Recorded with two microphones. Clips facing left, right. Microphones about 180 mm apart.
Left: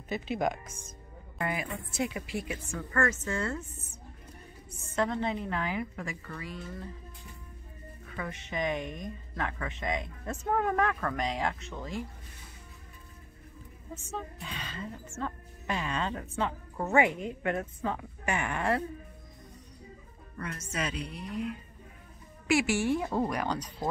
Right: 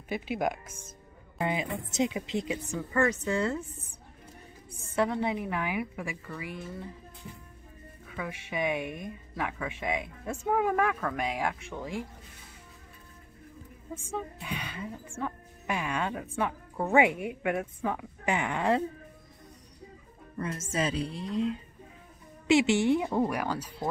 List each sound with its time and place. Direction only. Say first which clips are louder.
0.1 s speech: even; 10° right (ahead or behind)
1.4 s a woman's voice: right 3 dB; 20° right (ahead or behind)
4.9 s speech: right 2 dB; 10° right (ahead or behind)
8.1 s speech: right 1 dB; 5° right (ahead or behind)
13.9 s speech: right 3 dB; 10° right (ahead or behind)
20.3 s a woman's voice: right 5 dB; 25° right (ahead or behind); by 23.7 s 10° right (ahead or behind)